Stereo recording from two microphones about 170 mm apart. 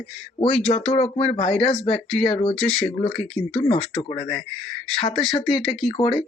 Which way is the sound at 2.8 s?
35° left (ahead or behind).